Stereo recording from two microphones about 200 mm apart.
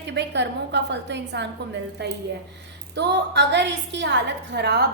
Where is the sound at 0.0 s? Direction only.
60° right (ahead or behind).